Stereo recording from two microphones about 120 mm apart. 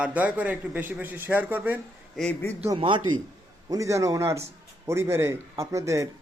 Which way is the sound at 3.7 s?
25° right (ahead or behind).